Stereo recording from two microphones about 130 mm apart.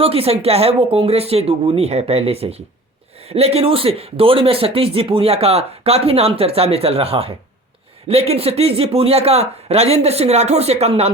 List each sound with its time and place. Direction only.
0.0 s speech: 50° right (ahead or behind)